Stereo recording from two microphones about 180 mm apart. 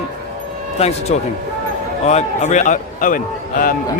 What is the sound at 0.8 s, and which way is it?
A man's voice, 35° left (ahead or behind).